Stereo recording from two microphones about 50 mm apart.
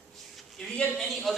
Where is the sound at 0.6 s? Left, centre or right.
Left.